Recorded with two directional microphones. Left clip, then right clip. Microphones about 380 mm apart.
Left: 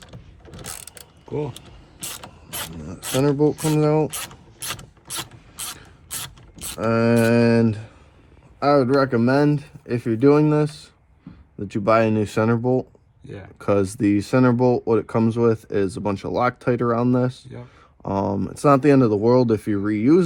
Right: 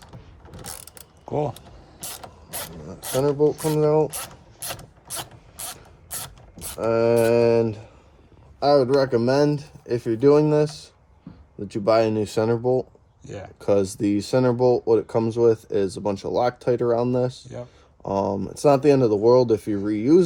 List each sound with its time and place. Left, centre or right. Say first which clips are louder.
2.8 s speech: left 1 dB; left
6.7 s speech: even; left
8.7 s speech: even; centre
11.7 s speech: left 1 dB; centre
12.5 s speech: even; left
13.2 s speech: right 2 dB; centre
13.6 s speech: left 1 dB; centre